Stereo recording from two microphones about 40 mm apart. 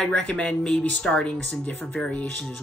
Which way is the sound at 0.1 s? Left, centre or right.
Left.